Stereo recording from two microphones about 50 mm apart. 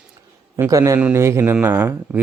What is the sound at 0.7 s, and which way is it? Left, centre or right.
Speech, right.